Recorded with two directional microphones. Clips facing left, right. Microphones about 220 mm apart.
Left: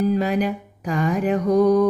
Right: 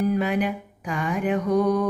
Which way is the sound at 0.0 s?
35° left (ahead or behind).